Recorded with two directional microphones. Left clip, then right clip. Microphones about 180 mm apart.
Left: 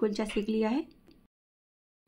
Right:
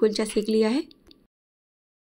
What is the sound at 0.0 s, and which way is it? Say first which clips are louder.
Speech: right 8 dB; 15° right (ahead or behind).